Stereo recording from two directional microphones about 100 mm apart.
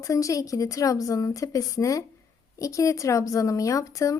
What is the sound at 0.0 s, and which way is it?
Speech, 35° left (ahead or behind).